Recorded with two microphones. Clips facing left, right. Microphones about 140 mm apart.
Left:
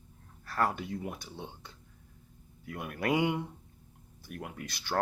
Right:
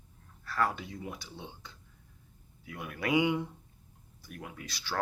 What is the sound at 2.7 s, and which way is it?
Speech, 50° left (ahead or behind).